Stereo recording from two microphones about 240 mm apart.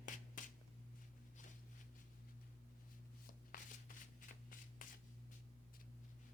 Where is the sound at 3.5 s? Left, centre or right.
Left.